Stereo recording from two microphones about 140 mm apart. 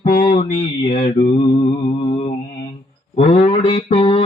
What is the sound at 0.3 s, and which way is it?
Mantra, 40° left (ahead or behind).